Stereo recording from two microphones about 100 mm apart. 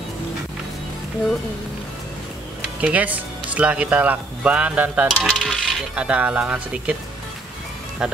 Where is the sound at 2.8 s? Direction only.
15° right (ahead or behind).